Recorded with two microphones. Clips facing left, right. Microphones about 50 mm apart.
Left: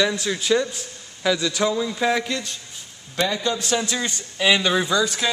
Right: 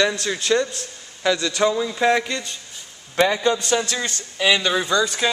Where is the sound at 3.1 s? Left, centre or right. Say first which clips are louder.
Right 5 dB; right.